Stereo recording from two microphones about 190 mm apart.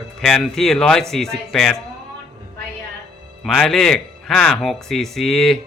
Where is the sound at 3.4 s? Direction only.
Centre (ahead or behind).